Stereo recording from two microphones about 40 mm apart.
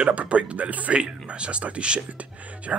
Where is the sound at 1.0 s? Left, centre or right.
Right.